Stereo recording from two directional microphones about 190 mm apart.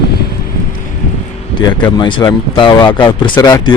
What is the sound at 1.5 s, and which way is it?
Speech, 25° left (ahead or behind).